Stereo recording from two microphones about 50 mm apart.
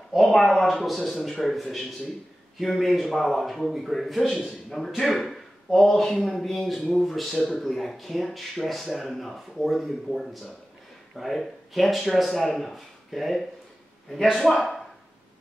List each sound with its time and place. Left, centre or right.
0.1 s speech: centre